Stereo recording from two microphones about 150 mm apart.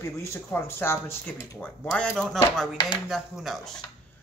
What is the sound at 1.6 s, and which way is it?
Speech, 5° left (ahead or behind).